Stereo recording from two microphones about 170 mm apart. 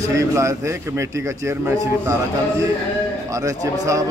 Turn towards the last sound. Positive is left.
turn(degrees=-20)  # may be behind; listen again after turning